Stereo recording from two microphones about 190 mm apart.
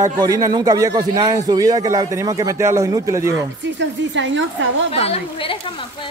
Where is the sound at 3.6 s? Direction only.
70° right (ahead or behind).